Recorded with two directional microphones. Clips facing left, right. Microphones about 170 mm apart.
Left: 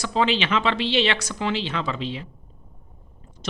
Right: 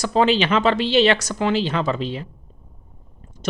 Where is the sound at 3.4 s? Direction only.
45° right (ahead or behind).